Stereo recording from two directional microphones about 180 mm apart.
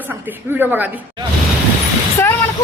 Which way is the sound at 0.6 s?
10° right (ahead or behind).